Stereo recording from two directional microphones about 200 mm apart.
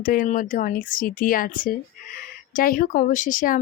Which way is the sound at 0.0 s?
45° left (ahead or behind).